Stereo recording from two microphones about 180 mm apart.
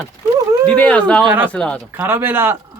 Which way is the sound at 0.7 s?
5° left (ahead or behind).